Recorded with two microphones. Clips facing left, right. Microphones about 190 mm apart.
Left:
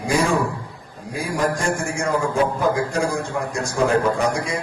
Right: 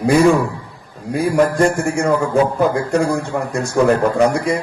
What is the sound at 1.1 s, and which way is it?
A man's voice, 60° right (ahead or behind).